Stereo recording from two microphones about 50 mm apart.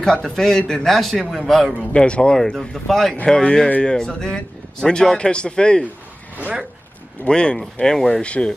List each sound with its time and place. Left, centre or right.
0.0 s a man's voice: centre
0.8 s speech: centre
1.7 s speech: left
2.7 s speech: centre
3.3 s a man's voice: centre
7.2 s a man's voice: centre